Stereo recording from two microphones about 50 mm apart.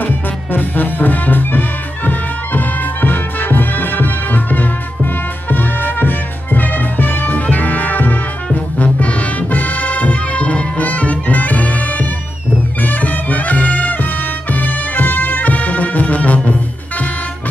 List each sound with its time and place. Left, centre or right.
0.0 s music: left